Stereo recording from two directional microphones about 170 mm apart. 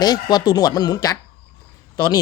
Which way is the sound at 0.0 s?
25° left (ahead or behind).